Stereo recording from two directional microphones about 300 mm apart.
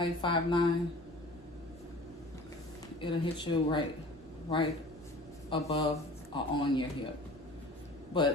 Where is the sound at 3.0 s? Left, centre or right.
Centre.